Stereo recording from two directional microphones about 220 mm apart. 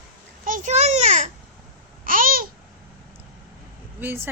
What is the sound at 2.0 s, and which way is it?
Babbling, 40° right (ahead or behind).